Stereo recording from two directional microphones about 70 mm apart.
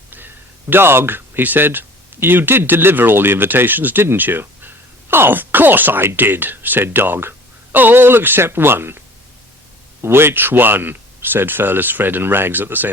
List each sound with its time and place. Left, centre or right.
0.1 s speech: right